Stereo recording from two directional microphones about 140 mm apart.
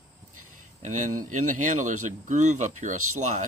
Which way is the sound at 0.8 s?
60° right (ahead or behind).